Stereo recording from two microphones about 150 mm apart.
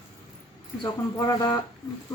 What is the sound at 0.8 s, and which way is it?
Speech, 20° left (ahead or behind).